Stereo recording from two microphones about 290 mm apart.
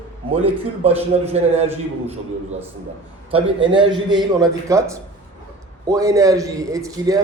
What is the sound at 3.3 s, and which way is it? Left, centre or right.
A man's voice, centre.